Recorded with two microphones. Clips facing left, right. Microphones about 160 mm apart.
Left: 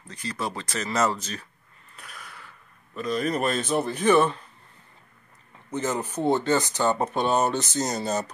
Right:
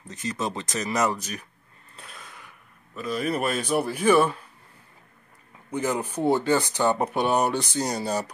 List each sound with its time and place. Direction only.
0.1 s speech: 20° right (ahead or behind)
2.0 s a sound: 25° right (ahead or behind)
3.0 s speech: 5° right (ahead or behind)
5.7 s speech: 10° right (ahead or behind)